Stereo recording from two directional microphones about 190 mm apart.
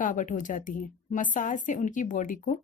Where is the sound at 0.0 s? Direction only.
45° left (ahead or behind).